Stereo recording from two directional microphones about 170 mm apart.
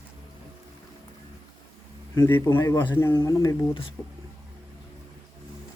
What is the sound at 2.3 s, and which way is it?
Speech, 20° left (ahead or behind).